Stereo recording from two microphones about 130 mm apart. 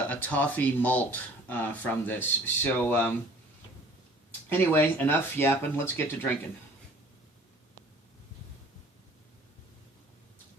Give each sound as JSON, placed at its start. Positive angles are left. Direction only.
{"t": 0.1, "sound": "speech", "side_deg": 15}
{"t": 4.4, "sound": "speech", "side_deg": 15}